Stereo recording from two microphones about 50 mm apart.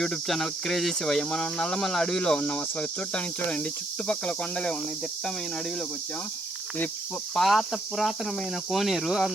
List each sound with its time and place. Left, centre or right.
0.0 s speech: centre
7.3 s cricket: centre